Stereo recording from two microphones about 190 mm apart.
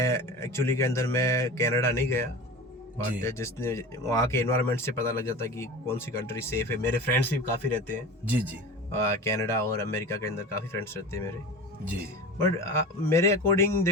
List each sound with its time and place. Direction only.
0.0 s speech: 15° left (ahead or behind)
3.2 s speech: 15° left (ahead or behind)
8.2 s speech: 10° right (ahead or behind)
8.9 s speech: 15° left (ahead or behind)
12.4 s speech: 15° left (ahead or behind)